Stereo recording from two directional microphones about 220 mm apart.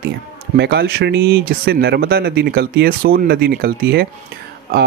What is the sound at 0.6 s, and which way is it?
Speech, 50° right (ahead or behind).